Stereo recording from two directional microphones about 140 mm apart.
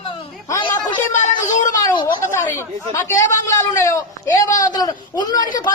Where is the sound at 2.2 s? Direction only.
15° left (ahead or behind).